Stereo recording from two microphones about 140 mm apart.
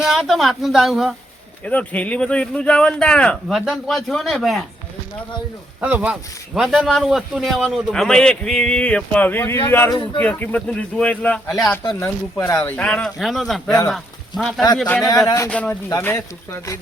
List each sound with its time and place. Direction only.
0.0 s speech: 5° right (ahead or behind)
1.6 s speech: 10° left (ahead or behind)
5.8 s speech: 10° right (ahead or behind); by 12.7 s 20° left (ahead or behind)
12.7 s speech: 5° left (ahead or behind)
14.8 s speech: 10° left (ahead or behind)